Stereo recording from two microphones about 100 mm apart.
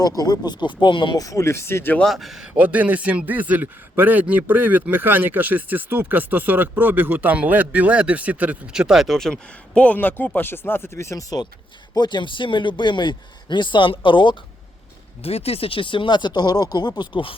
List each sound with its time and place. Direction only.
0.0 s speech: 40° left (ahead or behind)
1.2 s speech: 30° left (ahead or behind)
2.0 s speech: centre (ahead or behind)
2.5 s a man's voice: 15° right (ahead or behind); by 11.4 s 35° left (ahead or behind)
11.9 s speech: 45° left (ahead or behind)
15.2 s speech: 85° left; by 17.3 s 55° left (ahead or behind)